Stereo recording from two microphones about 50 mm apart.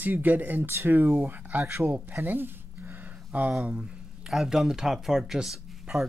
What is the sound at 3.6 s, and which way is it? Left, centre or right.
Speech, right.